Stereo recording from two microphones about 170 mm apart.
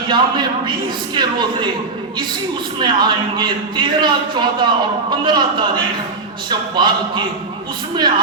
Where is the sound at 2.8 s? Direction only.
25° right (ahead or behind).